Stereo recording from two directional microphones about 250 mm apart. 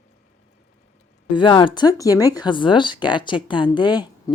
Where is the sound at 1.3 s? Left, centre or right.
Centre.